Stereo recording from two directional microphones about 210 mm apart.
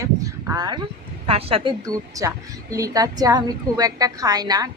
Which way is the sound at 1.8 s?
15° right (ahead or behind).